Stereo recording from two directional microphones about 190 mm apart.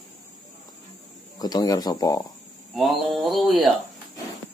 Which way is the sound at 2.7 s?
Centre (ahead or behind).